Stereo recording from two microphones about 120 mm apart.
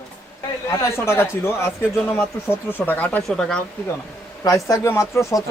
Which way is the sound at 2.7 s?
15° left (ahead or behind).